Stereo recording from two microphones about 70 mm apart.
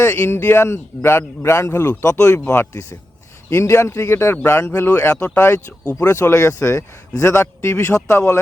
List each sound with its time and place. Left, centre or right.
0.0 s a man's voice: left
1.8 s a man's voice: left
2.1 s a man's voice: left
6.1 s a man's voice: left
8.1 s a man's voice: left